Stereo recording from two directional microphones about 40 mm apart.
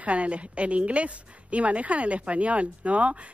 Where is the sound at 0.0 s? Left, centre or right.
Right.